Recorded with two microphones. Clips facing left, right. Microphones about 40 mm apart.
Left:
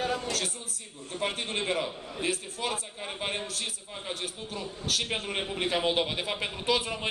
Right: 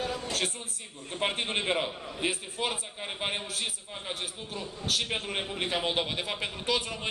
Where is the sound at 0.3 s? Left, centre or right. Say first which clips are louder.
Right 1 dB; right.